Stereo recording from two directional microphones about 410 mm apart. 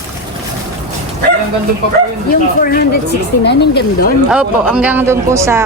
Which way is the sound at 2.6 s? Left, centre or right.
Left.